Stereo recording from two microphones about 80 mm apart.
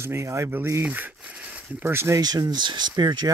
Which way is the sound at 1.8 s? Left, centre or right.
Right.